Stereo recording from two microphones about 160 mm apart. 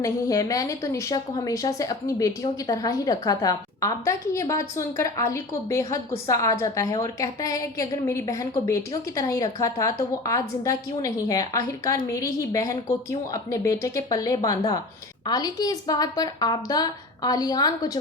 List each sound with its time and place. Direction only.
0.0 s a woman's voice: 20° left (ahead or behind)